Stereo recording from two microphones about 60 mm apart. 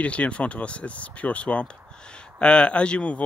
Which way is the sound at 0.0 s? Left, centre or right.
Left.